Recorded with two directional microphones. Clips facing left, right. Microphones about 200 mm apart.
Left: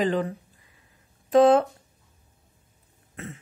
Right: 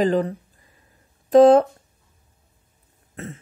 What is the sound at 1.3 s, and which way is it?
Speech, 40° right (ahead or behind).